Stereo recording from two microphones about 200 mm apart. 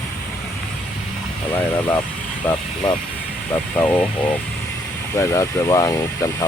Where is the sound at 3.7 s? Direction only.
5° left (ahead or behind).